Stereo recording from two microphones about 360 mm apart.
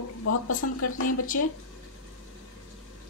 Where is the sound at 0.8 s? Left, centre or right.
Left.